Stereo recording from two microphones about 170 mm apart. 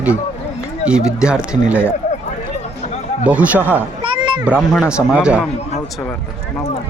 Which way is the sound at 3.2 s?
10° right (ahead or behind).